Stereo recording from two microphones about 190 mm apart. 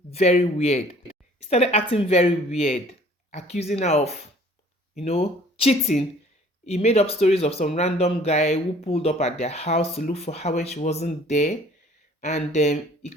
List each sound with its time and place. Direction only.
0.1 s speech: 35° left (ahead or behind)
1.4 s speech: 35° left (ahead or behind)